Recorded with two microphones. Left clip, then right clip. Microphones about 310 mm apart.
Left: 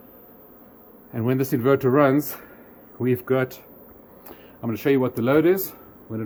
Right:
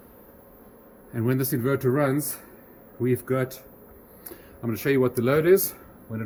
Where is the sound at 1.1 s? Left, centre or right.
Centre.